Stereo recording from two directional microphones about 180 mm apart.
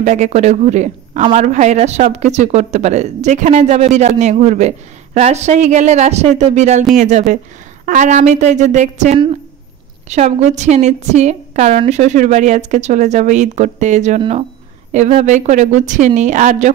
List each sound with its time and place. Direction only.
0.0 s a woman's voice: 40° right (ahead or behind)